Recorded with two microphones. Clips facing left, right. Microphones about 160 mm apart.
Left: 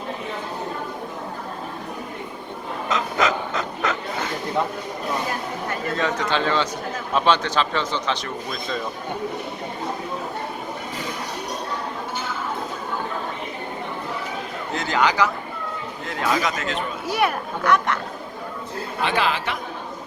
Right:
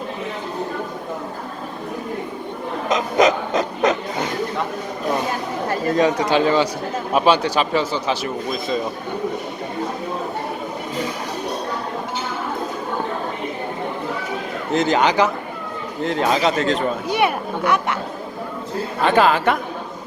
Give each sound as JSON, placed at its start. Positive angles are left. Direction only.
{"t": 2.9, "sound": "a sound", "side_deg": -20}
{"t": 6.0, "sound": "speech", "side_deg": -15}
{"t": 14.7, "sound": "speech", "side_deg": -20}
{"t": 17.1, "sound": "speech", "side_deg": 0}
{"t": 19.0, "sound": "a woman's voice", "side_deg": -45}